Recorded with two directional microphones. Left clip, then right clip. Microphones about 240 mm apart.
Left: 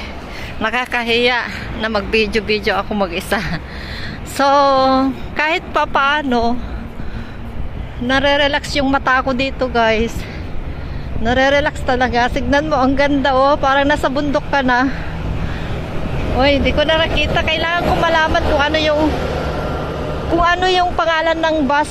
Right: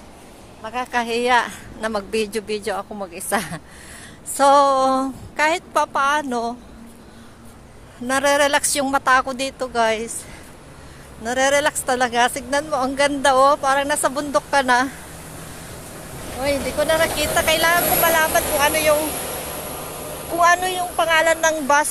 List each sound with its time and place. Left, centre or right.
0.9 s speech: right
5.3 s speech: centre
8.1 s speech: right
11.2 s speech: right
16.3 s speech: centre
20.3 s speech: centre
20.6 s speech: centre; by 21.8 s right